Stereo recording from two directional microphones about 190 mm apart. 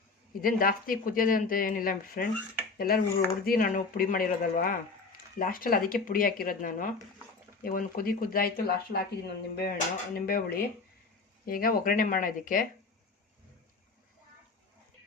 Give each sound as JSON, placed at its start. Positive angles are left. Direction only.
{"t": 0.4, "sound": "speech", "side_deg": 50}